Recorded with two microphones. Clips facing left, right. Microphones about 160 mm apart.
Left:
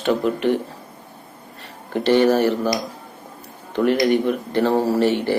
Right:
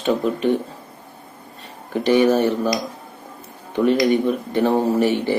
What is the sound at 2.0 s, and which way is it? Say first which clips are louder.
A man's voice: even; 15° right (ahead or behind).